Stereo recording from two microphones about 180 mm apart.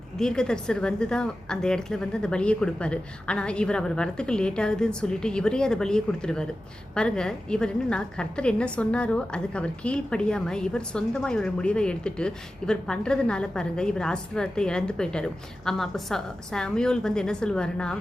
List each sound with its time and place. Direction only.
0.2 s a woman's voice: 5° left (ahead or behind)